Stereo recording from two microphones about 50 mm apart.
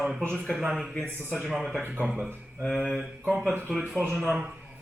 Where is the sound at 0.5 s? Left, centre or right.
Centre.